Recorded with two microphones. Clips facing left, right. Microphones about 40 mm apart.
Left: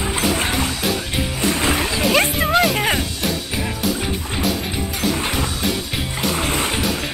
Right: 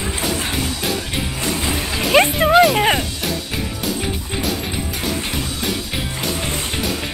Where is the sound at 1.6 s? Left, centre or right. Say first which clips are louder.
Left 3 dB; left.